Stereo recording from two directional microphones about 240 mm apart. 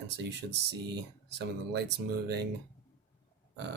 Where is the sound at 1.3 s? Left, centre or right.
Right.